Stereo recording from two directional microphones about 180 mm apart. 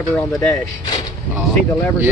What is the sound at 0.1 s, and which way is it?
Speech, 5° left (ahead or behind).